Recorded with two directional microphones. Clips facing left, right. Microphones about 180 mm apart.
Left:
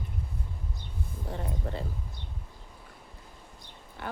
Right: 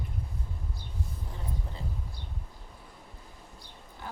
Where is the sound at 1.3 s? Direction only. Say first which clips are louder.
Left 6 dB; 65° left (ahead or behind).